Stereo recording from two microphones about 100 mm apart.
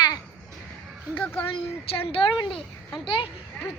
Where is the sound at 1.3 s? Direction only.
65° left (ahead or behind).